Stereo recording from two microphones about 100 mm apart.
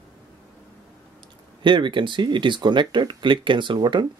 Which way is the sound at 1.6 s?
55° right (ahead or behind).